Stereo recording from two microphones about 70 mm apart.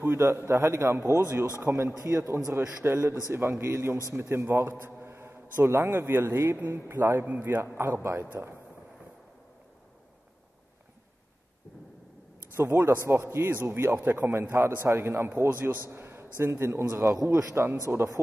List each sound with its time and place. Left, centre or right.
0.0 s a man's voice: right
12.5 s a man's voice: right